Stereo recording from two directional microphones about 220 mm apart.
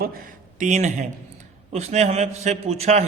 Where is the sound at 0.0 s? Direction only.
40° right (ahead or behind).